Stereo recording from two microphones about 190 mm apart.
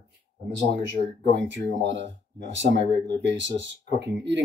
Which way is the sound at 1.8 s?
70° right (ahead or behind).